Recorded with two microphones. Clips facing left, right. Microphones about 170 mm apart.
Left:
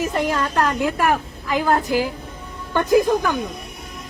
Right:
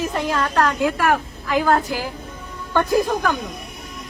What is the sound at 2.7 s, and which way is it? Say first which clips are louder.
Speech: left 2 dB; 15° left (ahead or behind).